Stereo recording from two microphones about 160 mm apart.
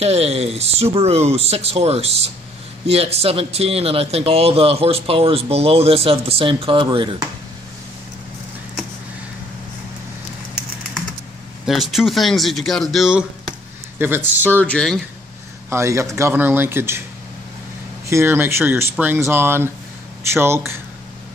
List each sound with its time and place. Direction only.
0.0 s speech: 40° right (ahead or behind)
11.6 s speech: centre (ahead or behind)
13.9 s speech: 15° right (ahead or behind)
14.5 s speech: 10° left (ahead or behind)
15.7 s speech: 20° right (ahead or behind)
18.0 s speech: 15° right (ahead or behind)